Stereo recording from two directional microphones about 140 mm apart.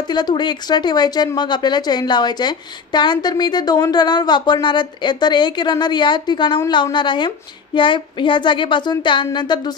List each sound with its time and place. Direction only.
0.1 s speech: 30° left (ahead or behind)